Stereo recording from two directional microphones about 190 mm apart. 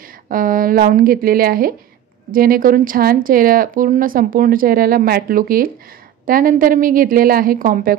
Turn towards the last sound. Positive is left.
turn(degrees=-45)  # may be behind; listen again after turning